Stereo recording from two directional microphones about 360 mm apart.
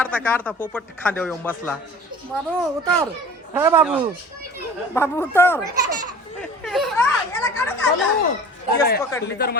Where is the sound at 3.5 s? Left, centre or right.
Centre.